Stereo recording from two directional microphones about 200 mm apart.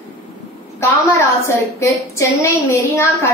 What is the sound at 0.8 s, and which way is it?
Speech, 15° left (ahead or behind).